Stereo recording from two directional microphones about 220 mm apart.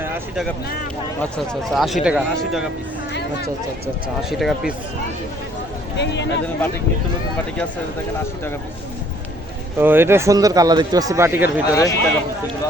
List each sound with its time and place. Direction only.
0.0 s speech: 10° right (ahead or behind)
1.7 s speech: centre (ahead or behind)
4.2 s speech: centre (ahead or behind)
6.0 s speech: 55° left (ahead or behind)
9.7 s speech: 10° right (ahead or behind)
11.7 s speech: 15° left (ahead or behind)